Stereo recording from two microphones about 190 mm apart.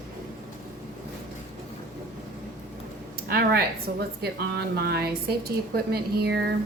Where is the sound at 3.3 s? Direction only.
55° right (ahead or behind).